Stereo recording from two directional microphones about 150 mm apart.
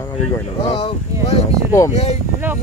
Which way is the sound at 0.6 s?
40° left (ahead or behind).